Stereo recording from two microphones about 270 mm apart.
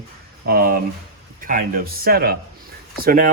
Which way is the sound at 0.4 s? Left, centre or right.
Right.